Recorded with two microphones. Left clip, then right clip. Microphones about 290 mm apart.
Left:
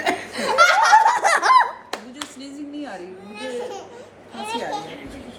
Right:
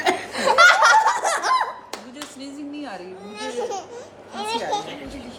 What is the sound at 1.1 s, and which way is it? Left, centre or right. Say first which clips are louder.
Laughter: left 4 dB; left.